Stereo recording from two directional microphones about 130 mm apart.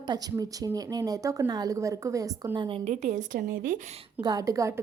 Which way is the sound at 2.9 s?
65° right (ahead or behind).